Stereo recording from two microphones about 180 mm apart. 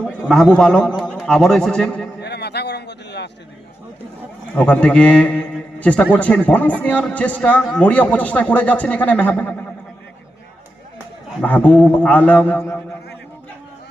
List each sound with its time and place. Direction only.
0.2 s a man's voice: centre (ahead or behind)
2.2 s a sound: 70° left (ahead or behind)
4.5 s a man's voice: 5° left (ahead or behind)
11.3 s a man's voice: 10° left (ahead or behind)